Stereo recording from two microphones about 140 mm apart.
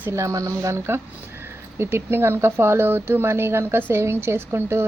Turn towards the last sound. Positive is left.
turn(degrees=-15)  # may be behind; listen again after turning